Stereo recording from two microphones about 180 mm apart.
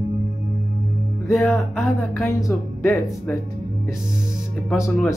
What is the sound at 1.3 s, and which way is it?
Speech, 10° left (ahead or behind).